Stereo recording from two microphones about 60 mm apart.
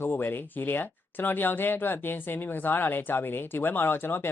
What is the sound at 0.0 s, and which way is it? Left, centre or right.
Speech, left.